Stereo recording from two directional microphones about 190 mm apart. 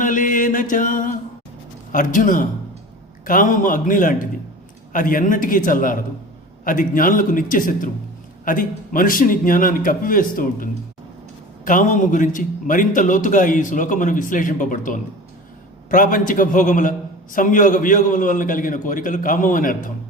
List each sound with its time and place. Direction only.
0.0 s mantra: 45° left (ahead or behind)
1.9 s a man's voice: 45° left (ahead or behind)